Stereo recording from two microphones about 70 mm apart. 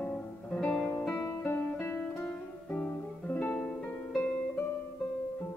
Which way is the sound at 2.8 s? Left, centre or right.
Left.